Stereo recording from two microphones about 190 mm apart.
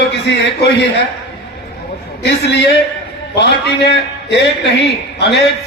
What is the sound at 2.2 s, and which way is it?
A man's voice, 65° left (ahead or behind).